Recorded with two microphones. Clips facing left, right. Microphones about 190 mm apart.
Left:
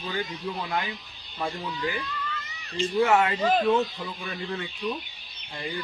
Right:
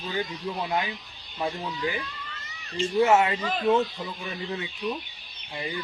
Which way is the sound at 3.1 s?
20° right (ahead or behind).